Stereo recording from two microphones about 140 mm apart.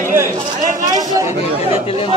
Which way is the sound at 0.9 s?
25° right (ahead or behind).